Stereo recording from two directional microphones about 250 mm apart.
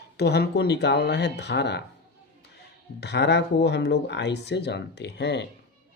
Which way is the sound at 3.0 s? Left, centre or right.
Left.